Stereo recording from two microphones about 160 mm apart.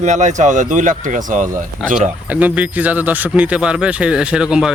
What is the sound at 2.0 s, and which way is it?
Speech, 10° right (ahead or behind).